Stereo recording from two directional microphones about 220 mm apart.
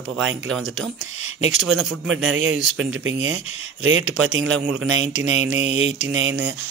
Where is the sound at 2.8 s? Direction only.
60° right (ahead or behind).